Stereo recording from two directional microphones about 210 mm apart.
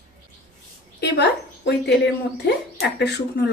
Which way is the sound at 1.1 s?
55° left (ahead or behind).